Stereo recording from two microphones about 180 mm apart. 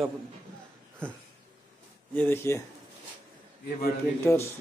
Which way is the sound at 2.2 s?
15° left (ahead or behind).